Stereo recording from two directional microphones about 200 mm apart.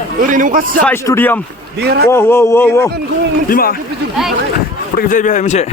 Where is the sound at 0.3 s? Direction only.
40° right (ahead or behind).